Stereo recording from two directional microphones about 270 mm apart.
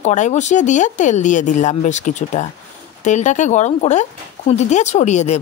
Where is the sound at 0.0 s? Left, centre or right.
Left.